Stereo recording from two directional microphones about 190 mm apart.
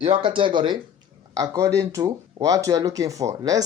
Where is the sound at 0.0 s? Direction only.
25° right (ahead or behind).